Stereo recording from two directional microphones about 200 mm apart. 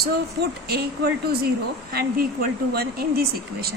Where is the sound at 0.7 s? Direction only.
50° right (ahead or behind).